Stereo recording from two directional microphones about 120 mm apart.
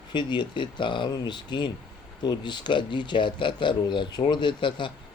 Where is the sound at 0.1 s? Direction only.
40° left (ahead or behind).